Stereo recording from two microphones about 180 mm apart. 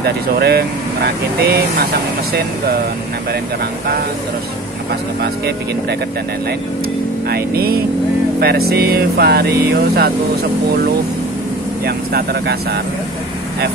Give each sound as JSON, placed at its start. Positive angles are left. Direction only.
{"t": 0.0, "sound": "speech", "side_deg": -65}
{"t": 5.2, "sound": "speech", "side_deg": -65}
{"t": 7.2, "sound": "speech", "side_deg": -60}
{"t": 11.8, "sound": "speech", "side_deg": -60}